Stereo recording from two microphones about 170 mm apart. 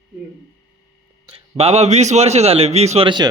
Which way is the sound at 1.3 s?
35° right (ahead or behind).